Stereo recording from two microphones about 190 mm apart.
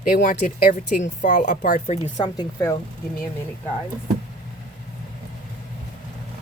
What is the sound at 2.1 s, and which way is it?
Speech, 20° left (ahead or behind).